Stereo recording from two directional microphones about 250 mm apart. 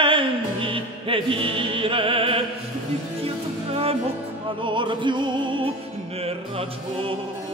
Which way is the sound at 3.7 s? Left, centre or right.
Right.